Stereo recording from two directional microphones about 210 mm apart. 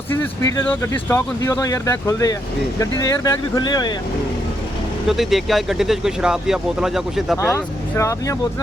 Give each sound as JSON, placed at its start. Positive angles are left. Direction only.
{"t": 0.1, "sound": "speech", "side_deg": 10}
{"t": 5.0, "sound": "speech", "side_deg": 0}
{"t": 7.4, "sound": "speech", "side_deg": 15}